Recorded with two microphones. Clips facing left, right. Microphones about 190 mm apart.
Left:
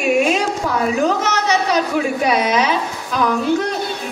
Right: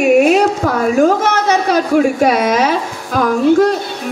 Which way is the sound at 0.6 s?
50° right (ahead or behind).